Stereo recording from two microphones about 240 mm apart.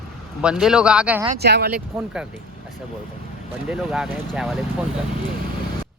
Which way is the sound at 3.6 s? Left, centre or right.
Centre.